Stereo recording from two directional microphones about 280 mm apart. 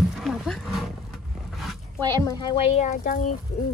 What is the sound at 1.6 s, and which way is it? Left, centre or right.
Dog, centre.